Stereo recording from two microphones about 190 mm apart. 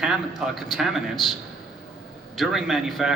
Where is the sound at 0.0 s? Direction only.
Centre (ahead or behind).